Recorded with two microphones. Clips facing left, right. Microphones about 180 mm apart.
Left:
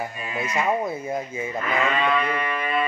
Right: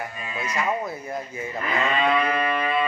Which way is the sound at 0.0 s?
25° left (ahead or behind).